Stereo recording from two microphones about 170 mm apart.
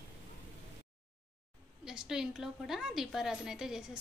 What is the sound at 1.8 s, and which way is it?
A woman's voice, 5° right (ahead or behind).